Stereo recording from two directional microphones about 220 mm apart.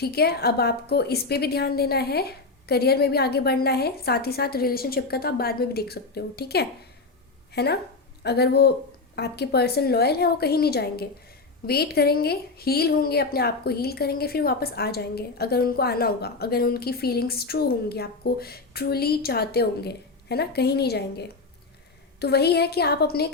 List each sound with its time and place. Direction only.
0.0 s a woman's voice: 45° left (ahead or behind)